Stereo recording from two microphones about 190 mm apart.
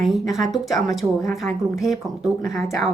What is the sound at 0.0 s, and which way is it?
Speech, centre (ahead or behind).